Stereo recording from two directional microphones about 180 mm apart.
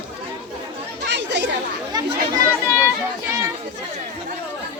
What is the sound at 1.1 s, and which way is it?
Chatter, 75° right (ahead or behind).